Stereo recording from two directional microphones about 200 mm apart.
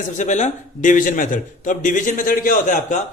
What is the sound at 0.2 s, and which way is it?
A man's voice, 35° left (ahead or behind).